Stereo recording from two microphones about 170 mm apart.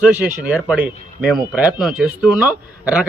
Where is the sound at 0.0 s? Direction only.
10° right (ahead or behind).